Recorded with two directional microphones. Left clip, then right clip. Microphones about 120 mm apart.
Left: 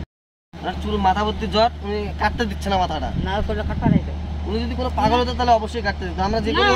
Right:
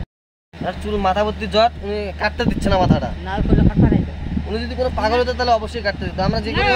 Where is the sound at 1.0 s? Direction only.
90° right.